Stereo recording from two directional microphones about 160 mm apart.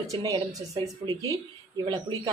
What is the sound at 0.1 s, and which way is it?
Speech, 25° right (ahead or behind).